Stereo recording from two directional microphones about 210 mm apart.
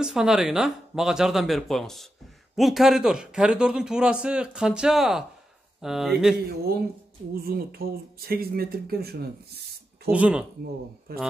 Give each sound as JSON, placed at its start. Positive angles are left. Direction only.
{"t": 0.0, "sound": "a man's voice", "side_deg": -5}
{"t": 7.4, "sound": "speech", "side_deg": -45}
{"t": 10.0, "sound": "a man's voice", "side_deg": -5}
{"t": 11.1, "sound": "speech", "side_deg": -45}